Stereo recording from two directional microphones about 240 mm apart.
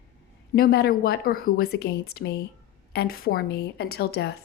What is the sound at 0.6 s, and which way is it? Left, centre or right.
A woman's voice, left.